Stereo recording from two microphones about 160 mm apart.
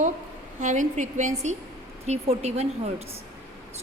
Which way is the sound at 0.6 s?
50° right (ahead or behind).